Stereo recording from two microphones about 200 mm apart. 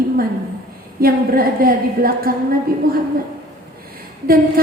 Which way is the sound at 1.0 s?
50° right (ahead or behind).